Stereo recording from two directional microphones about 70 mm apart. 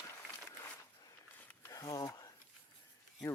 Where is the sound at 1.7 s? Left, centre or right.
Left.